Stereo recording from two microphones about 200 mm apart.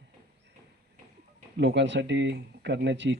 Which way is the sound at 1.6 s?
60° right (ahead or behind).